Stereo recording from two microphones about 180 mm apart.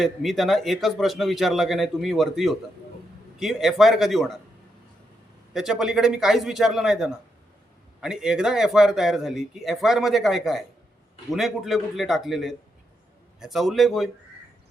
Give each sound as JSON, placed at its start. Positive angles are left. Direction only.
{"t": 0.0, "sound": "speech", "side_deg": 0}
{"t": 5.5, "sound": "speech", "side_deg": -5}